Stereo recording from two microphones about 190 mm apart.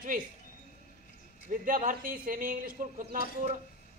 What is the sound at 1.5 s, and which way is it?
A man's voice, 45° right (ahead or behind).